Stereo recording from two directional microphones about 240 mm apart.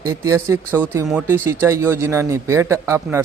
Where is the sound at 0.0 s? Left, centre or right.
Centre.